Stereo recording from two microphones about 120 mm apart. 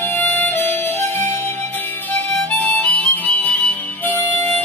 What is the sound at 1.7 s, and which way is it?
Harmonica, 15° left (ahead or behind).